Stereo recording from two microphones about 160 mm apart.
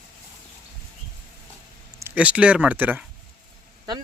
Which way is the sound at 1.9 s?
10° right (ahead or behind).